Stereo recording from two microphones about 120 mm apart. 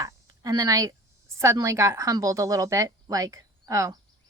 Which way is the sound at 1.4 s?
25° right (ahead or behind).